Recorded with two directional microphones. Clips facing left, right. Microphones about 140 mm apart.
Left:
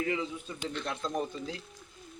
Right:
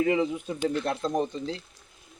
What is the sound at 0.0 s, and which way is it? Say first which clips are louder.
Speech: right 8 dB; 90° right.